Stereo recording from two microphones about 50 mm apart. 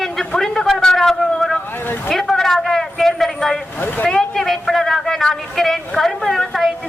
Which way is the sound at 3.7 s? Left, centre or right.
Left.